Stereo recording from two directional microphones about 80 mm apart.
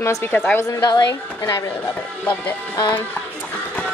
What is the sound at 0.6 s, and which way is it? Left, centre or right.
A woman's voice, left.